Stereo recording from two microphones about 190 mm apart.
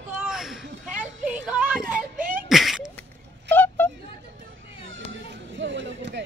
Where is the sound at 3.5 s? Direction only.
10° left (ahead or behind).